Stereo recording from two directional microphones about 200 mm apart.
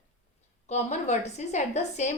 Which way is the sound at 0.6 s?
35° left (ahead or behind).